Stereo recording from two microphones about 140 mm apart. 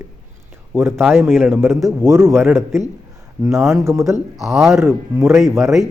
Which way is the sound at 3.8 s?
20° right (ahead or behind).